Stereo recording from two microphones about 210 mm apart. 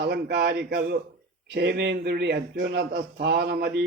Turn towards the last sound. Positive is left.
turn(degrees=-50)  # may be behind; listen again after turning